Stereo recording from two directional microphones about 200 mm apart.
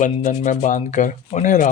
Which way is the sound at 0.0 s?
40° left (ahead or behind).